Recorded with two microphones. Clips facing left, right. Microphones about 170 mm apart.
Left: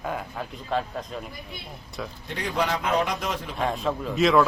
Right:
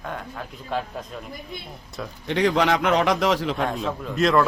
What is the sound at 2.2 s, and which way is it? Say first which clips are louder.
A man's voice: right 8 dB; 85° right.